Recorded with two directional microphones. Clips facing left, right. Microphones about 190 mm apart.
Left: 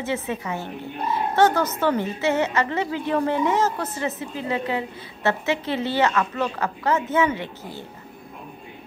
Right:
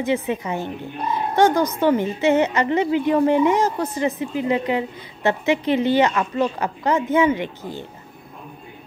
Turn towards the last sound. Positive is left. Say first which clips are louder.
# right 5 dB
turn(degrees=-15)  # may be behind; listen again after turning